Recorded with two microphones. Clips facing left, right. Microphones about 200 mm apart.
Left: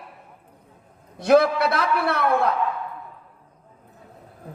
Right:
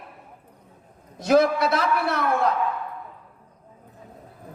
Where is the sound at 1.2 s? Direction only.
60° left (ahead or behind).